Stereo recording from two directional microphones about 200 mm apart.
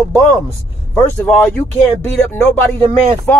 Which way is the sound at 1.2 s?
10° left (ahead or behind).